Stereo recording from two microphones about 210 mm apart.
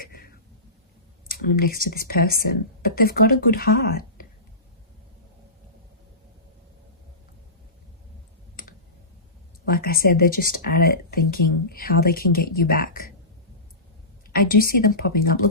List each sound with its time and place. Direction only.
0.0 s a sound: 45° left (ahead or behind)
1.5 s speech: 45° left (ahead or behind)
9.6 s speech: 45° left (ahead or behind)
14.3 s speech: 45° left (ahead or behind)